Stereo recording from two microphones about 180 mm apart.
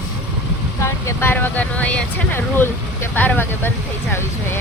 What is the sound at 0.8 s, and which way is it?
Speech, 15° left (ahead or behind).